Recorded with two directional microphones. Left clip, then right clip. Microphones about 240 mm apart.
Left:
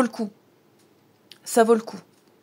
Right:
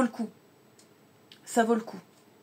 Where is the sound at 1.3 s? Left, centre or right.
Left.